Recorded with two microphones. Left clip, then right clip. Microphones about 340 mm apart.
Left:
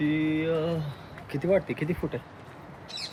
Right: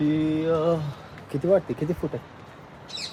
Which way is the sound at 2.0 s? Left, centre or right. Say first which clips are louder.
Right 2 dB; centre.